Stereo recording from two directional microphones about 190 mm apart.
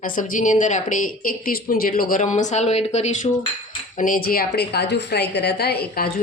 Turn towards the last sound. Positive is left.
turn(degrees=55)  # may be behind; listen again after turning